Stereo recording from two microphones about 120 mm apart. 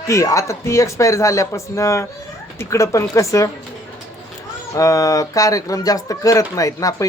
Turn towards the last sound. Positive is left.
turn(degrees=30)  # may be behind; listen again after turning